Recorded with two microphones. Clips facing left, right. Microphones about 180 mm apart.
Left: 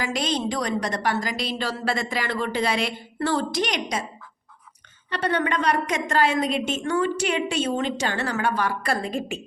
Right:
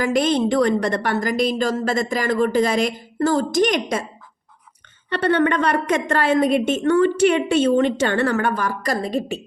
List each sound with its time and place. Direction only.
0.0 s a woman's voice: 55° right (ahead or behind)
5.0 s a woman's voice: 55° right (ahead or behind); by 9.4 s 35° right (ahead or behind)